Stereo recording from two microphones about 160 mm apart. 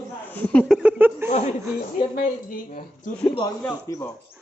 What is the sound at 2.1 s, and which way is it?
Speech, 60° left (ahead or behind).